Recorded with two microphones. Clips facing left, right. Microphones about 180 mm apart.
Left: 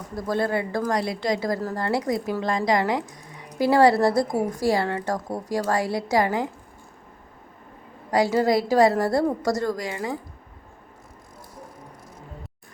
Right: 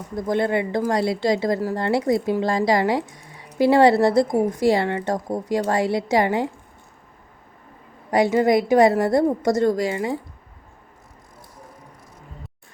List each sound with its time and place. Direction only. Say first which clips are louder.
0.2 s speech: right 3 dB; 20° right (ahead or behind)
8.1 s speech: right 3 dB; 20° right (ahead or behind)